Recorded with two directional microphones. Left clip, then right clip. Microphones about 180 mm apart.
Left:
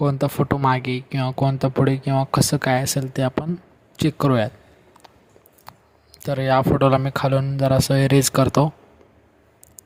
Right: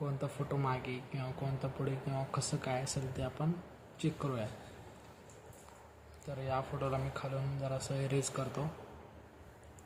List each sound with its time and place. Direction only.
0.0 s speech: 65° left (ahead or behind)
6.1 s speech: 65° left (ahead or behind)